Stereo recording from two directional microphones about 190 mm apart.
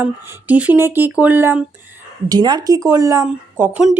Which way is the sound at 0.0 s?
10° right (ahead or behind).